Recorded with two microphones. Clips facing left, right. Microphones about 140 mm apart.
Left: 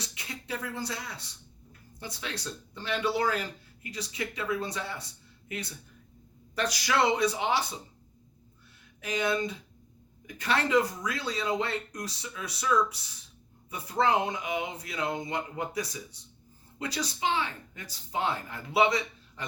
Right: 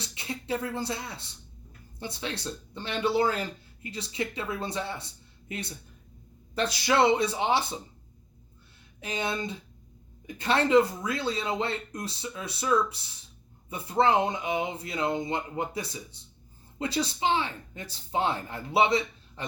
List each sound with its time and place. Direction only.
0.0 s speech: 30° right (ahead or behind)
9.0 s speech: 30° right (ahead or behind)